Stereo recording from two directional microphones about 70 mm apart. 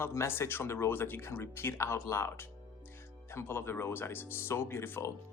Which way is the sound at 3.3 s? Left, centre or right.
Left.